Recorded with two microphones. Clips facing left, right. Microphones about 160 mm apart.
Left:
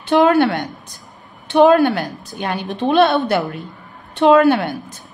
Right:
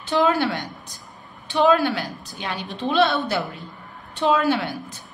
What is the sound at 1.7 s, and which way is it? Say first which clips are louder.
A woman's voice: left 6 dB; 55° left (ahead or behind).